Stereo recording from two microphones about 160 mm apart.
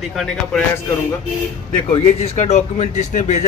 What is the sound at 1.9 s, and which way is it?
Speech, 40° left (ahead or behind).